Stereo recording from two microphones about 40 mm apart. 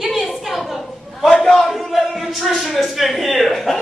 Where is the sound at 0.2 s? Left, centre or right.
Centre.